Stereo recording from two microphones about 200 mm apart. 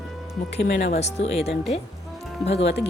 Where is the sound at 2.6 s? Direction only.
60° left (ahead or behind).